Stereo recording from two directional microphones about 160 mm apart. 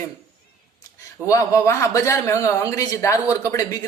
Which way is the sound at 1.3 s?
20° left (ahead or behind).